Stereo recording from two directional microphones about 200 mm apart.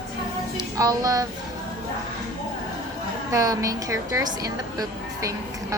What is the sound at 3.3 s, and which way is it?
A woman's voice, 15° right (ahead or behind).